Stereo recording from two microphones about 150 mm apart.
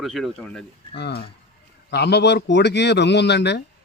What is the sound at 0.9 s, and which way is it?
Speech, 90° left.